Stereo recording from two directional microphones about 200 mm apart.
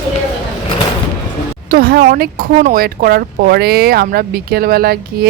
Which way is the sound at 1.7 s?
50° right (ahead or behind).